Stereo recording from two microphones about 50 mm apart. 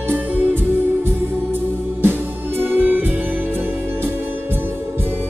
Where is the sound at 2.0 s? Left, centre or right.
Right.